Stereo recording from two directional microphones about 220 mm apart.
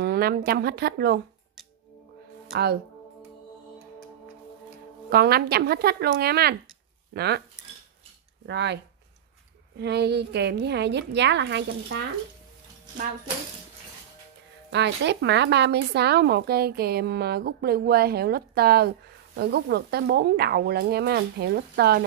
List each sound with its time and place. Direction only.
0.0 s a woman's voice: 45° right (ahead or behind)
2.5 s speech: 45° right (ahead or behind)
5.1 s speech: 45° right (ahead or behind)
8.5 s speech: 50° right (ahead or behind)
9.8 s speech: 50° right (ahead or behind)
14.7 s speech: 50° right (ahead or behind)